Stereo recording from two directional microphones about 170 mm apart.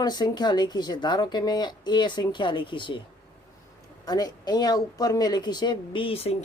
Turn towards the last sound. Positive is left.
turn(degrees=35)  # may be behind; listen again after turning